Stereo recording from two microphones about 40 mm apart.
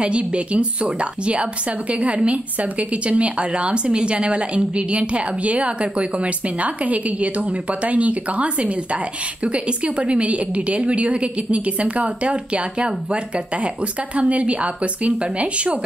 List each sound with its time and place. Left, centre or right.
0.0 s a woman's voice: right